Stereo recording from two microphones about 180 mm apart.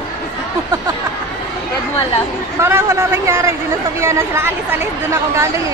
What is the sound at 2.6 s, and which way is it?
A woman's voice, 15° right (ahead or behind).